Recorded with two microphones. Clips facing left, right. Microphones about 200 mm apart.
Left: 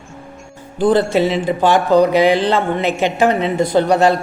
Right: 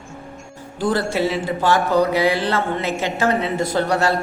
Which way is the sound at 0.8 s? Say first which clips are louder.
Left 6 dB; 20° left (ahead or behind).